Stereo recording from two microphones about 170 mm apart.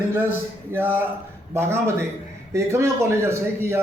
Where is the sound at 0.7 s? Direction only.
10° right (ahead or behind).